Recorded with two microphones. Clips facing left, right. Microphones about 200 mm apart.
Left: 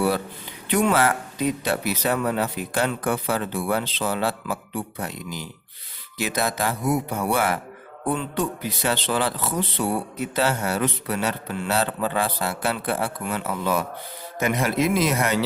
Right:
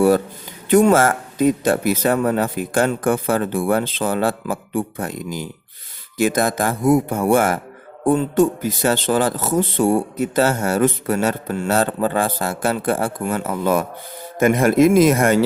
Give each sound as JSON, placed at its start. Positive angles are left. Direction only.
{"t": 0.7, "sound": "speech", "side_deg": -45}